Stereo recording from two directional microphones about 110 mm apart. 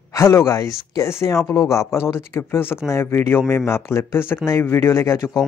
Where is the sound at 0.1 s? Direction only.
25° left (ahead or behind).